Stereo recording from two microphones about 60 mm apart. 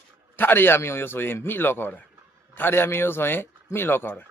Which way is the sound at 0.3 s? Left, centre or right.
Left.